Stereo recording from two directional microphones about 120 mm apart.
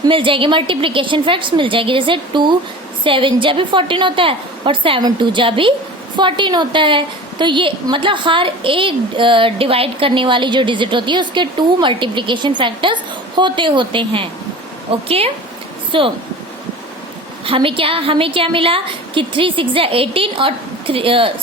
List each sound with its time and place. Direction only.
0.1 s a woman's voice: 45° right (ahead or behind)
17.4 s a woman's voice: 50° right (ahead or behind)